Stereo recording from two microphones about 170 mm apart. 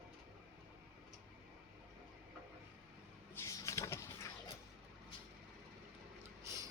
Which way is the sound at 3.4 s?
20° left (ahead or behind).